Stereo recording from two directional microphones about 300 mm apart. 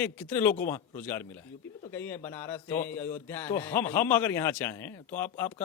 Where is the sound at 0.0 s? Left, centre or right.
Centre.